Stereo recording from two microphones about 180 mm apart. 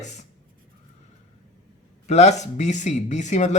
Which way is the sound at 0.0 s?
40° left (ahead or behind).